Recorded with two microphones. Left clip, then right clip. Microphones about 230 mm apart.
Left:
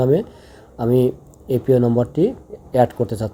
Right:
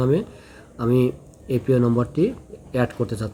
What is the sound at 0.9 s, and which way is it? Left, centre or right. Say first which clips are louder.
Speech: left 3 dB; left.